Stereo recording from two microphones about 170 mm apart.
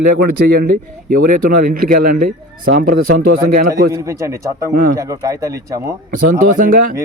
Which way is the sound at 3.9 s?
20° right (ahead or behind).